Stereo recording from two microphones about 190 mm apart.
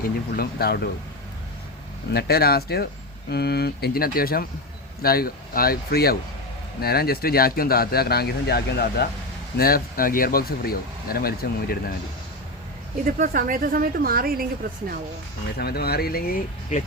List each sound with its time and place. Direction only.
0.0 s speech: 55° left (ahead or behind)
2.1 s speech: 55° left (ahead or behind)
13.1 s speech: 45° right (ahead or behind)
15.5 s speech: 55° left (ahead or behind)